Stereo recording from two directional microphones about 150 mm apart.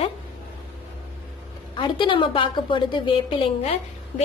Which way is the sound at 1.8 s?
30° left (ahead or behind).